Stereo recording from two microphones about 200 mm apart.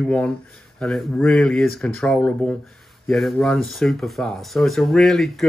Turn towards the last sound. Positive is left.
turn(degrees=0)  # may be behind; listen again after turning